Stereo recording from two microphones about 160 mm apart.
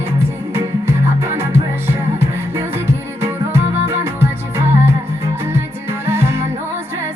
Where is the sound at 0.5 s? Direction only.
15° right (ahead or behind).